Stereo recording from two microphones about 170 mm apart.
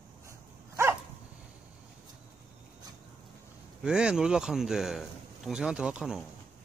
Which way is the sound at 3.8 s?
5° right (ahead or behind).